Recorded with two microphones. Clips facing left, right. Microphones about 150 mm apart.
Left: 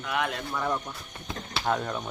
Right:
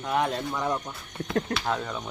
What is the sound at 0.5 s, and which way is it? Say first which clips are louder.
Speech: left 2 dB; 15° right (ahead or behind).